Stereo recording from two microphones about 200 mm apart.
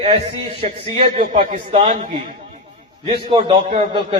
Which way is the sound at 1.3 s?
40° right (ahead or behind).